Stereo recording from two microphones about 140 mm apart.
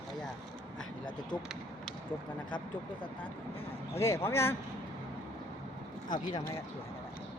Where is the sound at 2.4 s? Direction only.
35° left (ahead or behind).